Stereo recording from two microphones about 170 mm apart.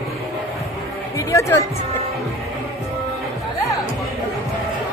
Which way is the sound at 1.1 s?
20° left (ahead or behind).